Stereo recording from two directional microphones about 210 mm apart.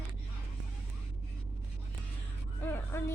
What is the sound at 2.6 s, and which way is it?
Speech, 10° left (ahead or behind).